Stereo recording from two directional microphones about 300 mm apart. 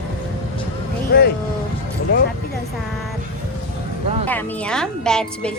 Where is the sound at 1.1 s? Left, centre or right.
Left.